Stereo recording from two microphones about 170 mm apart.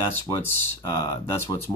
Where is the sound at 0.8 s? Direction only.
25° left (ahead or behind).